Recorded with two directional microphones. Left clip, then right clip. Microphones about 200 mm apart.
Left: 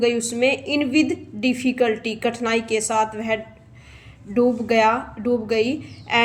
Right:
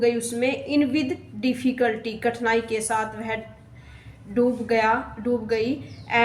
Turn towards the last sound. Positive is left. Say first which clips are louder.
# left 2 dB
turn(degrees=40)  # may be behind; listen again after turning